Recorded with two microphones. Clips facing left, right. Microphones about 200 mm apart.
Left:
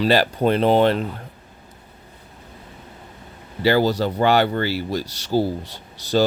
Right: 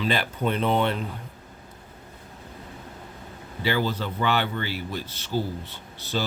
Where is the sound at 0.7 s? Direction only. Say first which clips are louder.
Left 8 dB; 90° left.